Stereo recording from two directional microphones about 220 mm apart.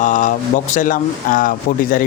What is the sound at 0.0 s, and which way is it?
Speech, 35° left (ahead or behind).